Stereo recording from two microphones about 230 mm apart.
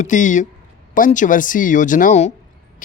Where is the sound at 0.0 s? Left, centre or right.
Left.